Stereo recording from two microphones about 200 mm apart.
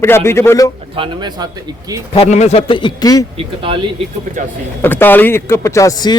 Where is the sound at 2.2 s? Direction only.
35° left (ahead or behind); by 3.3 s 20° left (ahead or behind).